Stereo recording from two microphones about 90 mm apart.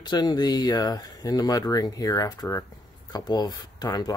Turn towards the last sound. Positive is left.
turn(degrees=50)  # may be behind; listen again after turning